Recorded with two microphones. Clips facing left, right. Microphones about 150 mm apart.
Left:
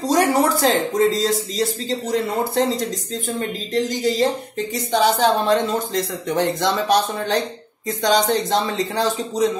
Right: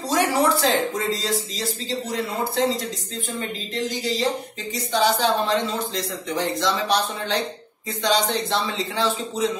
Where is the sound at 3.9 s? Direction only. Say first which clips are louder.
Left 3 dB; 45° left (ahead or behind).